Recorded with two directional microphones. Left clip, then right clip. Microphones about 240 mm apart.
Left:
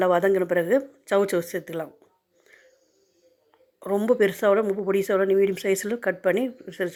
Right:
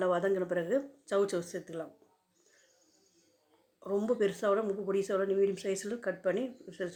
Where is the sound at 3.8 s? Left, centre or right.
Left.